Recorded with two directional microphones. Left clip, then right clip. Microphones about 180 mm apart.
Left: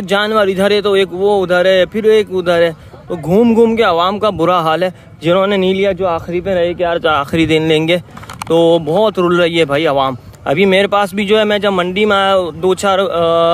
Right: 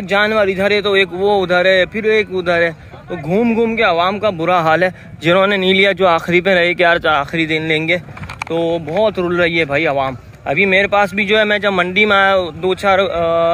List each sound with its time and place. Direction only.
0.1 s speech: 40° left (ahead or behind); by 5.9 s 10° left (ahead or behind)
5.9 s speech: 10° right (ahead or behind)
7.0 s speech: 20° left (ahead or behind)
7.2 s speech: 35° left (ahead or behind)
8.5 s speech: 50° left (ahead or behind)